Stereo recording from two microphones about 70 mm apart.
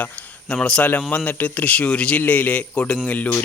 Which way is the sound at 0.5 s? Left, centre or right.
Centre.